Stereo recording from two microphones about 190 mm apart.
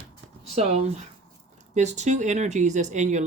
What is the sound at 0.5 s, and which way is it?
Speech, 35° right (ahead or behind).